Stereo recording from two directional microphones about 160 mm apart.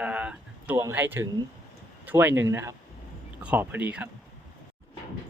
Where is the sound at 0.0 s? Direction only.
10° right (ahead or behind).